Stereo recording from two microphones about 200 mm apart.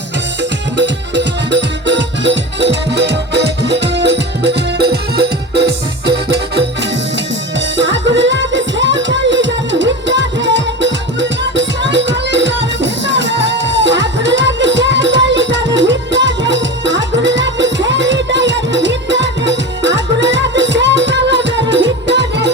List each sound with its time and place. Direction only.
0.8 s music: 60° right (ahead or behind)
7.8 s music: 65° right (ahead or behind)